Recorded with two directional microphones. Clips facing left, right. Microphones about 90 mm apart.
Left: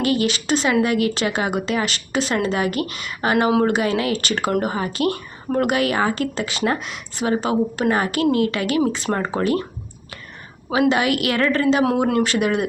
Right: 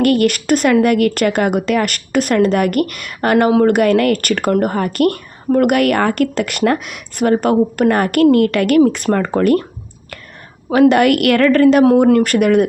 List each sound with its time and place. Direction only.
0.0 s speech: 60° right (ahead or behind)
10.7 s speech: 55° right (ahead or behind)